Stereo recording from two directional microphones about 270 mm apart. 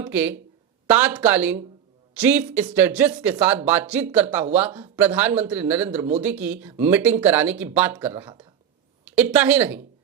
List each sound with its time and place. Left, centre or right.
0.0 s a man's voice: centre